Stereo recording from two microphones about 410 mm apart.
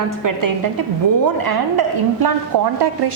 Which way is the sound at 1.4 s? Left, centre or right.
Right.